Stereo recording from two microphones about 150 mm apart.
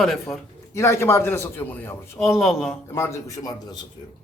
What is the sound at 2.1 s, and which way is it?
Speech, centre (ahead or behind).